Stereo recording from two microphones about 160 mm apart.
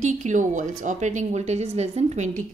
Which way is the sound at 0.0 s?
50° right (ahead or behind).